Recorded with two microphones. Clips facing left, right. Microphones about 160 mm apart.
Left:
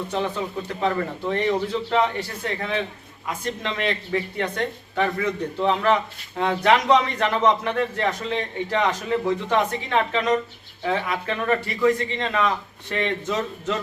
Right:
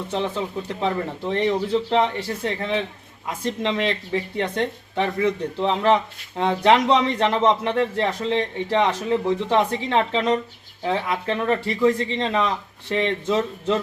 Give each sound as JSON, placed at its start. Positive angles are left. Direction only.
{"t": 0.1, "sound": "speech", "side_deg": -25}
{"t": 1.9, "sound": "speech", "side_deg": -30}